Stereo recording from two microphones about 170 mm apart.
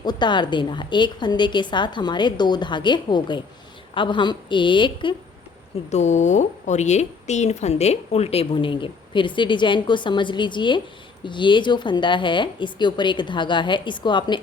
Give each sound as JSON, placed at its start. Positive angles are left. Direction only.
{"t": 0.0, "sound": "a woman's voice", "side_deg": 25}
{"t": 5.9, "sound": "a woman's voice", "side_deg": 45}